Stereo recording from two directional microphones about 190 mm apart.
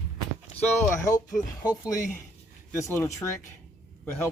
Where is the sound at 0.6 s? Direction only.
15° left (ahead or behind).